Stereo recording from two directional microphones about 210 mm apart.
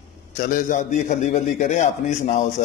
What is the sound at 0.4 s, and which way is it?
A man's voice, 40° left (ahead or behind).